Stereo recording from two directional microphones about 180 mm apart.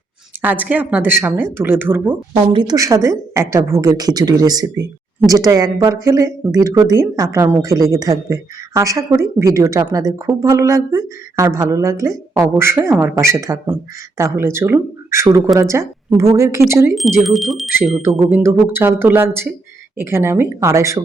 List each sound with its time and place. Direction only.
0.4 s a woman's voice: 10° right (ahead or behind)
2.3 s a woman's voice: 25° right (ahead or behind)
16.9 s speech: centre (ahead or behind)
18.3 s a woman's voice: 10° right (ahead or behind)